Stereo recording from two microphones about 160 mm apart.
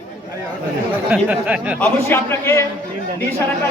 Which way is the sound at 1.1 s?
10° right (ahead or behind).